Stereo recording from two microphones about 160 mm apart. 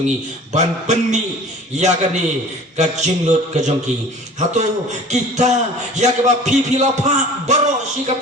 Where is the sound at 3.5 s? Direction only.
50° right (ahead or behind).